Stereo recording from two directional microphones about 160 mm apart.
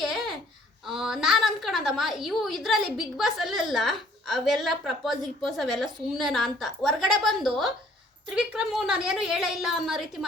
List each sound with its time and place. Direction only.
0.0 s babbling: centre (ahead or behind)
0.9 s a woman's voice: 5° right (ahead or behind)